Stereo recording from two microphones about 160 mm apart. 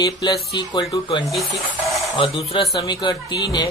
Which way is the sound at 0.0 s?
25° left (ahead or behind).